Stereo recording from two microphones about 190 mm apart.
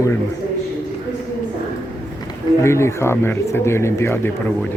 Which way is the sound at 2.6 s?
15° left (ahead or behind).